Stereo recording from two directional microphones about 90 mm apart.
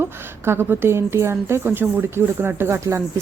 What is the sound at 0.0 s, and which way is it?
A woman's voice, 25° right (ahead or behind).